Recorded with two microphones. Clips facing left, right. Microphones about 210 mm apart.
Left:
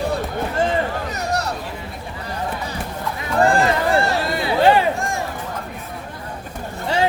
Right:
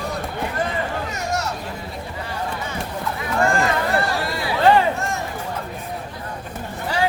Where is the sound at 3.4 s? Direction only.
35° left (ahead or behind).